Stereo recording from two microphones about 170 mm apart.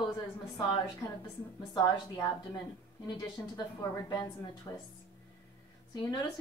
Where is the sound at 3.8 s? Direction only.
20° left (ahead or behind).